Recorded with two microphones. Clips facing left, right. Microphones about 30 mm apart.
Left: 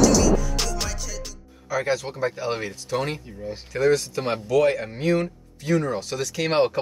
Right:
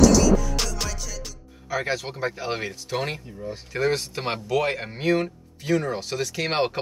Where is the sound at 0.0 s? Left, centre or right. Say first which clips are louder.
Right 1 dB; centre.